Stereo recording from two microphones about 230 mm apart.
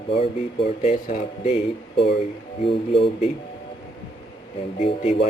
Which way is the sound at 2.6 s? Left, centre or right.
Left.